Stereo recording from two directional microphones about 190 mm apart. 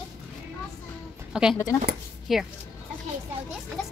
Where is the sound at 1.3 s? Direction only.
5° right (ahead or behind).